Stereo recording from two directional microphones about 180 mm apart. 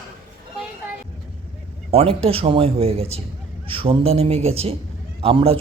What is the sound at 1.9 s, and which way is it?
A man's voice, 35° right (ahead or behind).